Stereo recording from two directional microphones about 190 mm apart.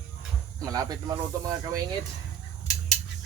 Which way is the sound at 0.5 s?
20° right (ahead or behind).